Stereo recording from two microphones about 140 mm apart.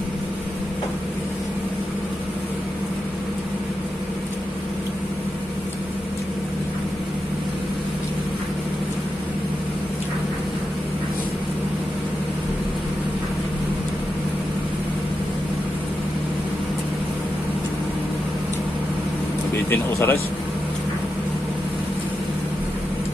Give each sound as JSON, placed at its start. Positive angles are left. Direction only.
{"t": 19.7, "sound": "vehicle", "side_deg": 15}